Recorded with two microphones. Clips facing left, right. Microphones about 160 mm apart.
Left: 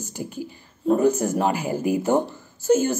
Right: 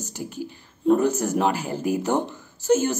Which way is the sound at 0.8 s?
10° left (ahead or behind).